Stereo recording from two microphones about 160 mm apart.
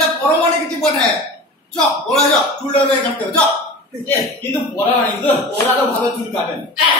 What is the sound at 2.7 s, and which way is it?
Speech, 10° left (ahead or behind).